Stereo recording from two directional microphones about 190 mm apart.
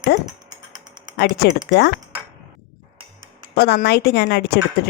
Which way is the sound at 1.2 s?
60° left (ahead or behind).